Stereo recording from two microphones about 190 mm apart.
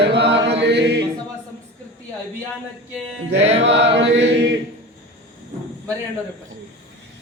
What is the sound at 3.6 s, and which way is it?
Chant, 70° right (ahead or behind).